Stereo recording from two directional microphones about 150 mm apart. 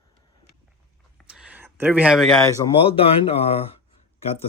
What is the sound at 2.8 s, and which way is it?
Speech, 40° left (ahead or behind).